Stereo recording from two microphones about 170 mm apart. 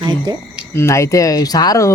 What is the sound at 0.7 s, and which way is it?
Speech, 15° left (ahead or behind).